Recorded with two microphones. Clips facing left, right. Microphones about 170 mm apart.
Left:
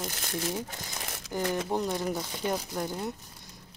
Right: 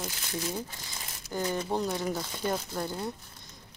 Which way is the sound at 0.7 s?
75° left (ahead or behind).